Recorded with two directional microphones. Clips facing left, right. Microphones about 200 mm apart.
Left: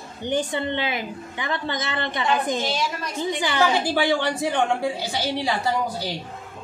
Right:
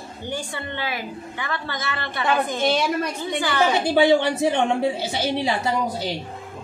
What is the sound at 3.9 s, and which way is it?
A woman's voice, 20° right (ahead or behind).